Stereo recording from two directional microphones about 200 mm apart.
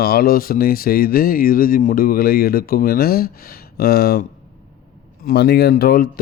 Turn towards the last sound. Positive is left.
turn(degrees=50)  # may be behind; listen again after turning